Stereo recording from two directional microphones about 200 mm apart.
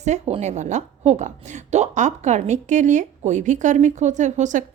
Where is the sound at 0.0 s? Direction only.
35° right (ahead or behind).